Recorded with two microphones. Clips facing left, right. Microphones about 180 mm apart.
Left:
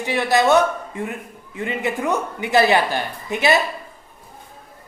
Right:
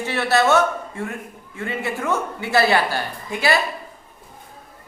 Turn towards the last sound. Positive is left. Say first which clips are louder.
# left 2 dB
turn(degrees=20)  # may be behind; listen again after turning